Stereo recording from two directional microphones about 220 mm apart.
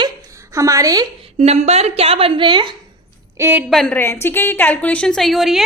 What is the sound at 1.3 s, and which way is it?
A woman's voice, 30° right (ahead or behind).